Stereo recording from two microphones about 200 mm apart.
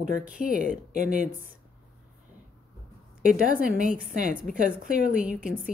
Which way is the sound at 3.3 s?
45° right (ahead or behind).